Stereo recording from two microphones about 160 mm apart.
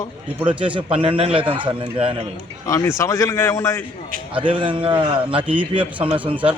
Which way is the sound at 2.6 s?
20° left (ahead or behind).